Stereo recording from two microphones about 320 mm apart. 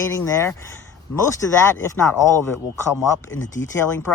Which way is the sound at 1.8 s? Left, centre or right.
Centre.